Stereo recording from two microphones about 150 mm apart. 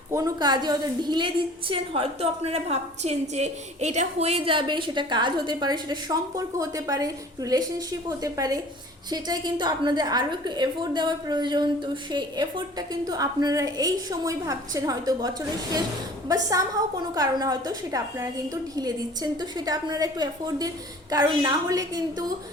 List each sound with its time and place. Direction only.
0.1 s a woman's voice: 20° right (ahead or behind)
16.3 s a woman's voice: 20° right (ahead or behind)